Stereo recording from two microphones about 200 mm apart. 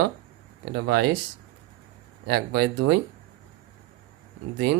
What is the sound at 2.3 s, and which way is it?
Speech, 55° right (ahead or behind).